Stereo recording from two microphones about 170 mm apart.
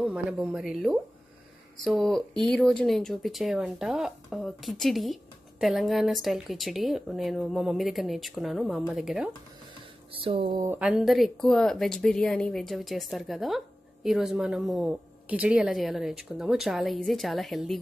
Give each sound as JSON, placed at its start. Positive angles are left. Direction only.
{"t": 0.0, "sound": "speech", "side_deg": -5}
{"t": 10.2, "sound": "speech", "side_deg": -30}
{"t": 10.6, "sound": "speech", "side_deg": -15}
{"t": 10.9, "sound": "speech", "side_deg": 0}